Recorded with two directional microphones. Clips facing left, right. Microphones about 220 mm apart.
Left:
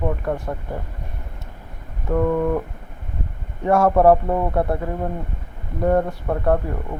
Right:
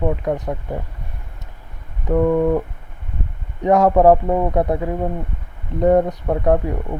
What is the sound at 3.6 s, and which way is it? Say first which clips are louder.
Speech: right 2 dB; 15° right (ahead or behind).